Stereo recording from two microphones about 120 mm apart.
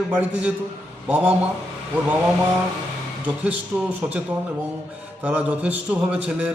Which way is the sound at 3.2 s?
10° right (ahead or behind).